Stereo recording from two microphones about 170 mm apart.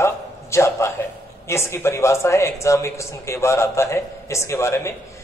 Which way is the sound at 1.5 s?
15° left (ahead or behind).